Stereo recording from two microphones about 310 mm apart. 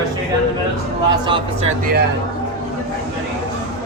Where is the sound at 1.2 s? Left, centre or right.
Centre.